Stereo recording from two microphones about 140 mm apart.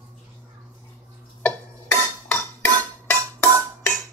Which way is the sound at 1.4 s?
10° left (ahead or behind).